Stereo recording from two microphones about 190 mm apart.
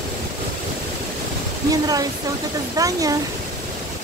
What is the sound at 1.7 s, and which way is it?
Speech, 20° right (ahead or behind).